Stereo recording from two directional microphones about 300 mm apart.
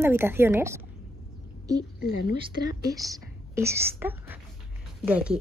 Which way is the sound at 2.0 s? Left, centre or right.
Left.